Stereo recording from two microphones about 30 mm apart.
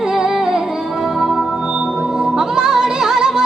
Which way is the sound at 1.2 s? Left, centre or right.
Centre.